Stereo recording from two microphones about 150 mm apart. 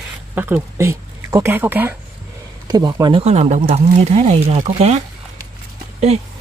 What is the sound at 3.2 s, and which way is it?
Speech, 45° right (ahead or behind).